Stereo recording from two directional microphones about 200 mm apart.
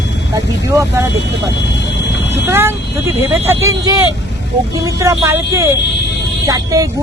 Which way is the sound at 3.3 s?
15° right (ahead or behind).